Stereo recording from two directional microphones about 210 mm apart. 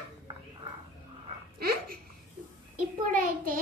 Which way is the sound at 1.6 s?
45° right (ahead or behind).